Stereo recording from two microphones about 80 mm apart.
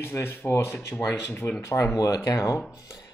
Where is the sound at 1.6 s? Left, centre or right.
Left.